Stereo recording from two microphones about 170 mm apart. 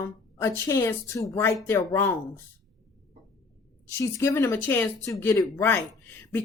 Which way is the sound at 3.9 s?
15° left (ahead or behind).